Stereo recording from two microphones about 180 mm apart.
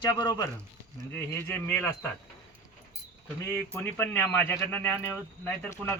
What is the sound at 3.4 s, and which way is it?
Speech, 15° left (ahead or behind).